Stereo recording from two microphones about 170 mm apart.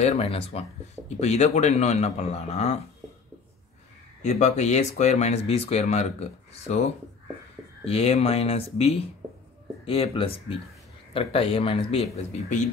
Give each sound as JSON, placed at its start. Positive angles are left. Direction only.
{"t": 0.0, "sound": "speech", "side_deg": 35}
{"t": 4.2, "sound": "speech", "side_deg": 40}